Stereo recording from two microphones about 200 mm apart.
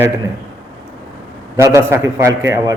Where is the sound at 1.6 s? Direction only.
15° right (ahead or behind).